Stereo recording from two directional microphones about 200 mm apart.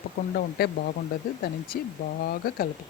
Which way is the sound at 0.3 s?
50° left (ahead or behind).